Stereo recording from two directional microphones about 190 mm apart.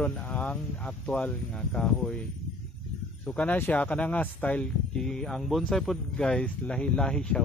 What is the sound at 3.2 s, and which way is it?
Speech, 5° left (ahead or behind).